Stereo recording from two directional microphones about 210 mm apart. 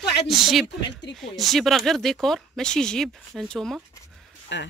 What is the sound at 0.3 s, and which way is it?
Speech, centre (ahead or behind).